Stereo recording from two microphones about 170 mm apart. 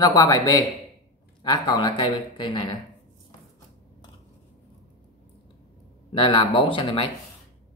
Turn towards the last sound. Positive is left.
turn(degrees=30)  # may be behind; listen again after turning